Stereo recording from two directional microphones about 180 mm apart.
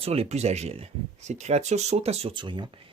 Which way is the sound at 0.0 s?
35° right (ahead or behind).